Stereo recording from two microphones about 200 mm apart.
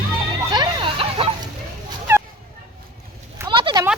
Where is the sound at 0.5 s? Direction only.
25° right (ahead or behind).